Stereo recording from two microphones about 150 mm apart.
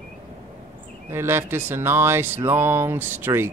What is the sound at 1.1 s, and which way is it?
Speech, 15° right (ahead or behind).